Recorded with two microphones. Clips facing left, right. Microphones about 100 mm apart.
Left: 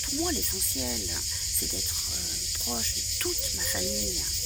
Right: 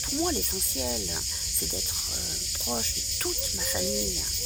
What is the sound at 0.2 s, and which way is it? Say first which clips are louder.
Snake: right 2 dB; 25° right (ahead or behind).